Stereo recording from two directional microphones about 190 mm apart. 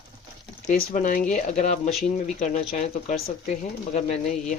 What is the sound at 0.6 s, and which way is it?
Speech, 40° left (ahead or behind).